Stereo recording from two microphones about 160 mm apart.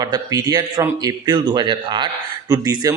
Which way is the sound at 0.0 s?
25° right (ahead or behind).